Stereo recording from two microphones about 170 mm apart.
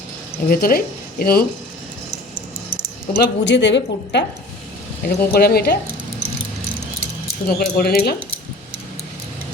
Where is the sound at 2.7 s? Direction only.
70° left (ahead or behind); by 4.3 s 90° left.